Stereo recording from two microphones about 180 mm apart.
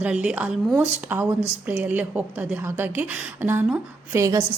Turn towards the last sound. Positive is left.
turn(degrees=-15)  # may be behind; listen again after turning